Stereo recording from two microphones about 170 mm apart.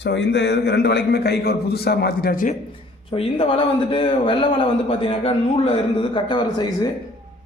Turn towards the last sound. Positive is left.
turn(degrees=25)  # may be behind; listen again after turning